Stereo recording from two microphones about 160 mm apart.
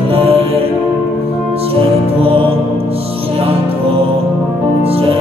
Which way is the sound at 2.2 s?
35° right (ahead or behind).